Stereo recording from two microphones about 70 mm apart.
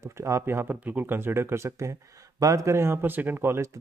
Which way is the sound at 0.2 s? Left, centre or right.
Right.